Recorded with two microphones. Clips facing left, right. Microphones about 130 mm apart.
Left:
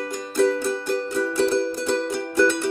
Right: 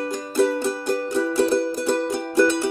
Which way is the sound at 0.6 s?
20° right (ahead or behind).